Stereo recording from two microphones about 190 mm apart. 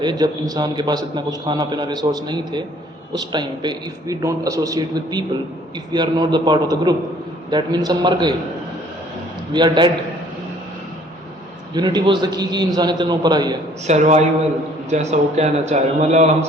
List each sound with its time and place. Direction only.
0.0 s a man's voice: 20° right (ahead or behind)
9.5 s a man's voice: 25° right (ahead or behind)
11.7 s a man's voice: 20° right (ahead or behind)
13.8 s a man's voice: 35° right (ahead or behind)